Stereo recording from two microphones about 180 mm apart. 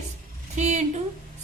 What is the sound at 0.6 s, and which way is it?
Speech, 40° right (ahead or behind).